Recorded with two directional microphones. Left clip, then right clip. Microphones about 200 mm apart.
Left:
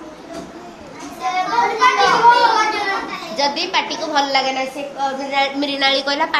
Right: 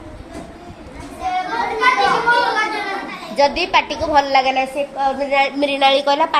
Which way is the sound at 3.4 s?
55° right (ahead or behind).